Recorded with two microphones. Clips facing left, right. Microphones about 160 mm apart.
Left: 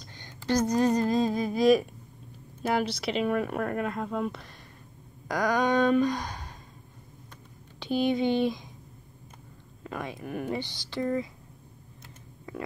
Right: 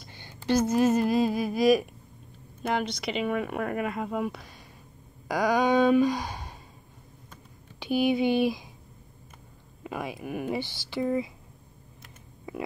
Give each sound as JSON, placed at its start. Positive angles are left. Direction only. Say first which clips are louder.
{"t": 0.0, "sound": "speech", "louder": "right 2 dB", "side_deg": -10}
{"t": 7.8, "sound": "speech", "louder": "right 1 dB", "side_deg": -10}
{"t": 9.8, "sound": "speech", "louder": "right 2 dB", "side_deg": -10}
{"t": 10.6, "sound": "speech", "louder": "right 2 dB", "side_deg": 15}
{"t": 10.9, "sound": "speech", "louder": "right 1 dB", "side_deg": -10}